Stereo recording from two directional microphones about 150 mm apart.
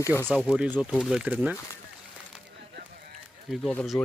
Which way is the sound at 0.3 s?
10° right (ahead or behind).